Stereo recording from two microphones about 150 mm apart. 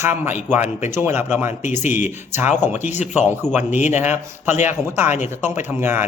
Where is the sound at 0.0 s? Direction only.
15° right (ahead or behind).